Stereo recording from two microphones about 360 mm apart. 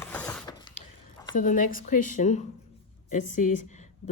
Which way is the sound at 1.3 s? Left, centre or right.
Left.